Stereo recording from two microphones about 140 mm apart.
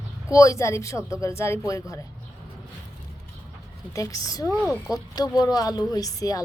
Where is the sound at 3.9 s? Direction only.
25° left (ahead or behind).